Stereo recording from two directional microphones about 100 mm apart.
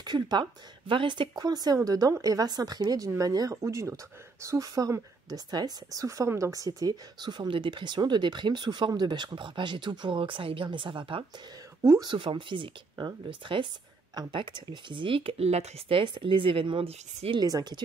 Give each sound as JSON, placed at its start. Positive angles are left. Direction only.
{"t": 0.0, "sound": "speech", "side_deg": -45}
{"t": 16.0, "sound": "speech", "side_deg": -55}
{"t": 17.4, "sound": "speech", "side_deg": -40}